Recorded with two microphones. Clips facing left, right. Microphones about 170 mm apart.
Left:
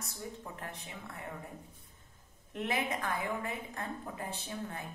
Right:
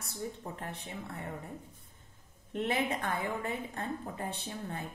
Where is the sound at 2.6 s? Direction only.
30° right (ahead or behind).